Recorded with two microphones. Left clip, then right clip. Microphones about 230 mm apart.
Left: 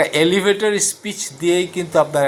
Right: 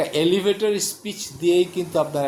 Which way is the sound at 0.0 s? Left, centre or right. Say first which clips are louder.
Left 5 dB; centre.